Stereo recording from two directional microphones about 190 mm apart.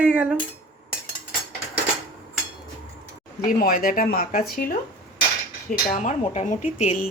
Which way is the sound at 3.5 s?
50° left (ahead or behind).